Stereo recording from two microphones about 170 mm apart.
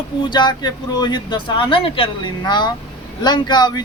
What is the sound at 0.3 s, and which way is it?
Speech, 25° left (ahead or behind).